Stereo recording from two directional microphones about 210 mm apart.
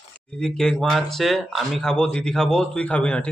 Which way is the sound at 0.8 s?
Centre (ahead or behind).